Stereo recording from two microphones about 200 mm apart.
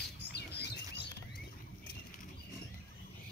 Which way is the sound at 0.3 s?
55° left (ahead or behind).